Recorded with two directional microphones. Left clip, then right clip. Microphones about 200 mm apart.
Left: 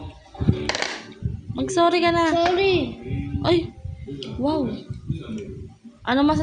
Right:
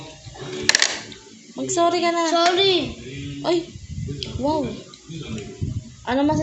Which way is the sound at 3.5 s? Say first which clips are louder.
Left 1 dB; 40° left (ahead or behind).